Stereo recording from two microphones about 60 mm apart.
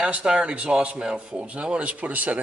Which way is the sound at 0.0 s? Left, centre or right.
Centre.